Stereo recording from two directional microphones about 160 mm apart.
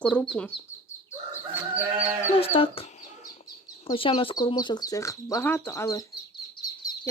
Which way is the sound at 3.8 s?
30° left (ahead or behind).